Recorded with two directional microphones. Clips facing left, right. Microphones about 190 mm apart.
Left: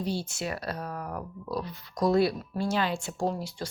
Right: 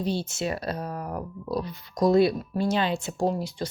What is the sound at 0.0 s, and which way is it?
Speech, 25° right (ahead or behind).